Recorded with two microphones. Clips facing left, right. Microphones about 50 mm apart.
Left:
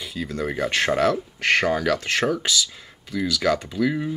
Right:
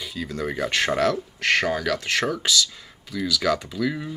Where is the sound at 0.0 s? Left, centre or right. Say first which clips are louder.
Left 1 dB; centre.